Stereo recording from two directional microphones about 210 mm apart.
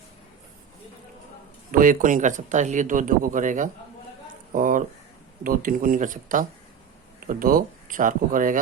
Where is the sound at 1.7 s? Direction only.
40° right (ahead or behind).